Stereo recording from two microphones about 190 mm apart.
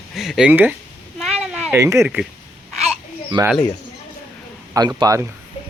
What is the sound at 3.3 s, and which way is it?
Speech, 25° right (ahead or behind).